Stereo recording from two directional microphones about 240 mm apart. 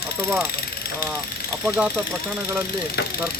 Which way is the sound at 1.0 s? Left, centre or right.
Left.